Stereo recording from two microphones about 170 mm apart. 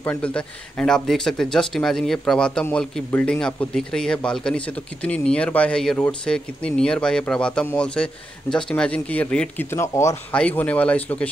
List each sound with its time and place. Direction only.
0.0 s speech: 10° left (ahead or behind)